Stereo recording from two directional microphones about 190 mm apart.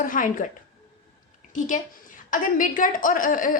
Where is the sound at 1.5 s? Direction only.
40° left (ahead or behind).